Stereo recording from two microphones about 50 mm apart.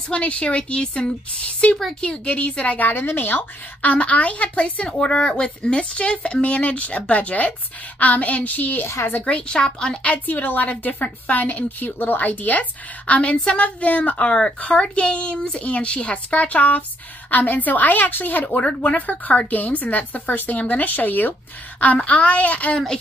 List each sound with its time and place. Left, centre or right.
0.1 s a woman's voice: left
9.2 s a woman's voice: centre; by 18.6 s left
18.6 s a woman's voice: left
21.9 s a woman's voice: left